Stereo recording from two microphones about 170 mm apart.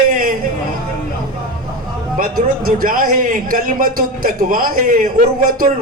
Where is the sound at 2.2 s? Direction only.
55° right (ahead or behind).